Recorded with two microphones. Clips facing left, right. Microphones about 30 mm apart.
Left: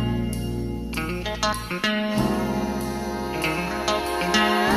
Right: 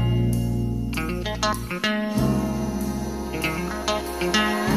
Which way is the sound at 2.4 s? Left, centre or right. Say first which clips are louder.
Left 1 dB; left.